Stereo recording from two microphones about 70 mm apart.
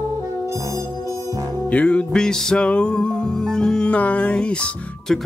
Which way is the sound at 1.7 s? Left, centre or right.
Centre.